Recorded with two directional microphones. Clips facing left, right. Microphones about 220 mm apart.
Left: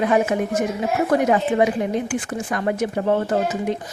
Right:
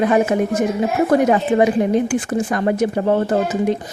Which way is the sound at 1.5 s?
40° right (ahead or behind).